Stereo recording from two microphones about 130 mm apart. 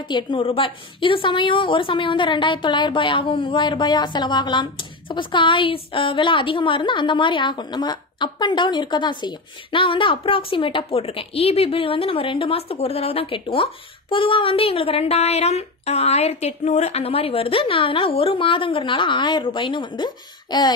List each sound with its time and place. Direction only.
0.1 s a woman's voice: 40° left (ahead or behind)